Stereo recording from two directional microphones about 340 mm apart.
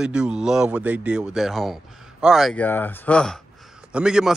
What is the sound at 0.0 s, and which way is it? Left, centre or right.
Speech, centre.